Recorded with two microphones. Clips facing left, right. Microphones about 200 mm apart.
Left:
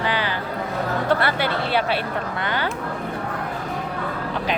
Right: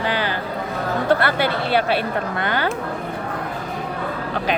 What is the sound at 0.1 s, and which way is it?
Music, 45° right (ahead or behind).